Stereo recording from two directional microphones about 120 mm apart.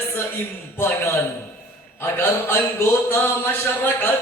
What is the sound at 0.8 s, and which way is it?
A man's voice, 20° left (ahead or behind).